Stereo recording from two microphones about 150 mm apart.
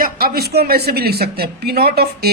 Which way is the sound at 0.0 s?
80° right.